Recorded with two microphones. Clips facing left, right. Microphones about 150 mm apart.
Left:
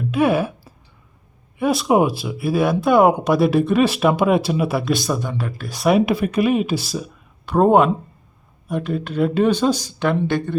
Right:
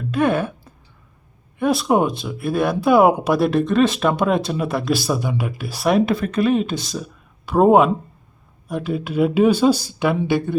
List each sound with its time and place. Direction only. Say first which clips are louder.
0.0 s a sound: left 1 dB; 5° left (ahead or behind)
1.5 s speech: left 1 dB; centre (ahead or behind)
6.1 s speech: even; 10° left (ahead or behind); by 10.5 s 5° right (ahead or behind)